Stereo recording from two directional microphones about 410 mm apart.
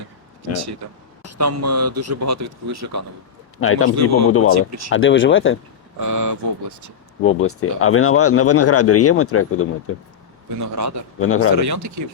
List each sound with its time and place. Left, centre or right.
1.2 s a man's voice: right
3.6 s speech: left
4.5 s a man's voice: right
4.9 s speech: left
6.0 s speech: right
7.3 s speech: left
10.6 s a man's voice: right
11.2 s speech: left
11.5 s speech: right